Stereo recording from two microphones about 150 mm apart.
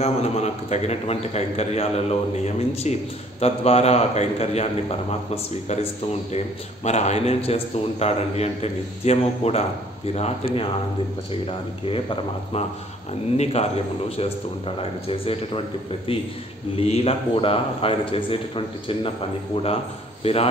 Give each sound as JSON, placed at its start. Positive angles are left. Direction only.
{"t": 0.0, "sound": "a man's voice", "side_deg": 45}
{"t": 13.4, "sound": "a man's voice", "side_deg": 45}
{"t": 16.7, "sound": "a man's voice", "side_deg": 40}